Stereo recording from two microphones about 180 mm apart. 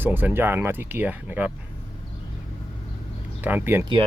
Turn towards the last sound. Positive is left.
turn(degrees=-10)  # may be behind; listen again after turning